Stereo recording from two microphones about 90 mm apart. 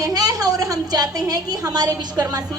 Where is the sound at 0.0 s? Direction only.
45° right (ahead or behind).